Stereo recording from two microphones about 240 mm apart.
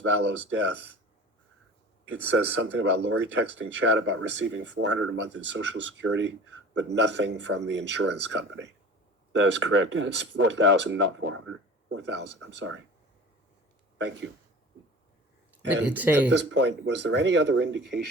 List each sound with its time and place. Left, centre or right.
0.0 s speech: right
2.3 s speech: right
15.9 s speech: centre
16.3 s speech: right